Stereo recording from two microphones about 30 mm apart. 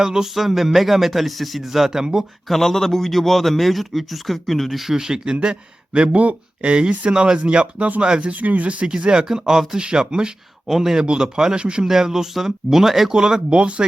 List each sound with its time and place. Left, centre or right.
0.0 s speech: centre
0.3 s a man's voice: centre
2.5 s a man's voice: centre
4.9 s speech: right
7.4 s speech: right
8.2 s speech: right
9.0 s speech: right
10.7 s speech: centre
10.9 s speech: right
11.9 s speech: centre
13.5 s speech: right